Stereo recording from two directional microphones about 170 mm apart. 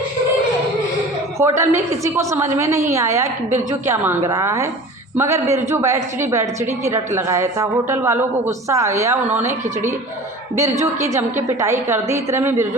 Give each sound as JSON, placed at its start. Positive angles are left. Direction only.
{"t": 1.4, "sound": "a woman's voice", "side_deg": -15}
{"t": 10.5, "sound": "a woman's voice", "side_deg": -15}